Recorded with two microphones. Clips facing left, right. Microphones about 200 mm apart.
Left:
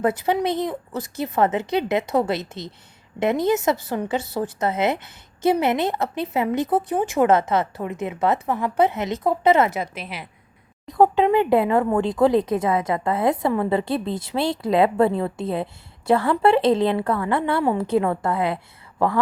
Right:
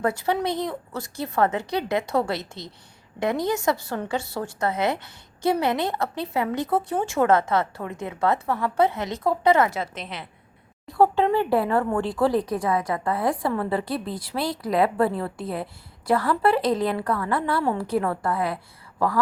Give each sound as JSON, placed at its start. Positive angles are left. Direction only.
{"t": 0.0, "sound": "speech", "side_deg": 20}
{"t": 9.9, "sound": "a woman's voice", "side_deg": 10}